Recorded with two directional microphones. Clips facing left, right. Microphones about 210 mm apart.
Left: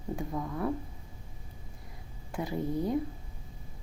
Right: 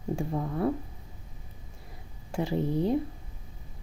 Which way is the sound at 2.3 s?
30° right (ahead or behind).